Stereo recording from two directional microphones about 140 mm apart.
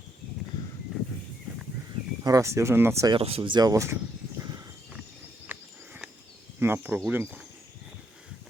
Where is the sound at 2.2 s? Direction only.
25° right (ahead or behind).